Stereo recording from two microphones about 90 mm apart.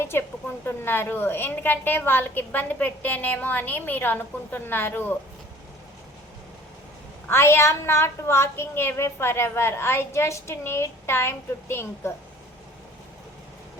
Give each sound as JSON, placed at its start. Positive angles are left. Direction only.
{"t": 0.0, "sound": "a woman's voice", "side_deg": 25}
{"t": 7.3, "sound": "a woman's voice", "side_deg": 30}